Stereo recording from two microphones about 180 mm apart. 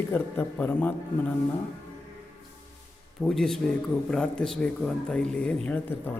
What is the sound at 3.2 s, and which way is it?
A man's voice, centre (ahead or behind).